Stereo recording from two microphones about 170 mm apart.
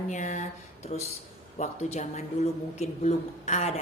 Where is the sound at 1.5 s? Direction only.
40° left (ahead or behind).